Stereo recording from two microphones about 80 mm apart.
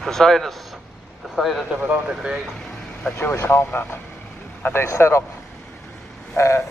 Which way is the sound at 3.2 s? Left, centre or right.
Left.